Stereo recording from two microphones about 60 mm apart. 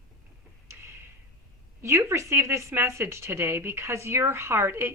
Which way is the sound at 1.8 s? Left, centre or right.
Right.